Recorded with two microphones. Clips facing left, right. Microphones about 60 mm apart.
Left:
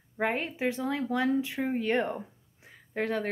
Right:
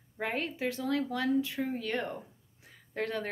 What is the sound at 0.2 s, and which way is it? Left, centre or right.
Speech, centre.